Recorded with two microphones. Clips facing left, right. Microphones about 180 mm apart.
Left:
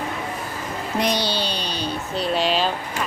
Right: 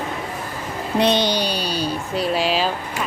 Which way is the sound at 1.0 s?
25° right (ahead or behind).